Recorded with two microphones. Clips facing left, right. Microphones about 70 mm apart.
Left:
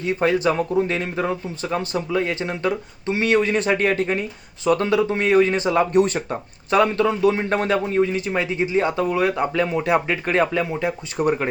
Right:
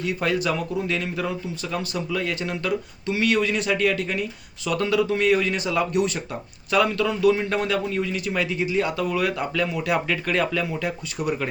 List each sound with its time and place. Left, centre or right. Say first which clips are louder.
0.0 s a man's voice: left 5 dB; left
11.2 s speech: left 6 dB; left